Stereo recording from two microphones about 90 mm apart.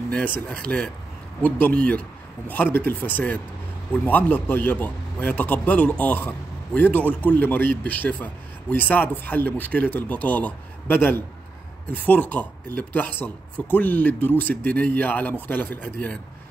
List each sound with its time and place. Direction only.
0.1 s a man's voice: 15° left (ahead or behind)